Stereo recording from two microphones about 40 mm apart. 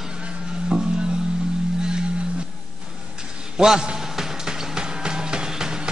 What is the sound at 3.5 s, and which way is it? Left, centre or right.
Music, centre.